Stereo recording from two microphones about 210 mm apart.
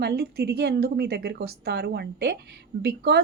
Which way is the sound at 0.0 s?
50° right (ahead or behind).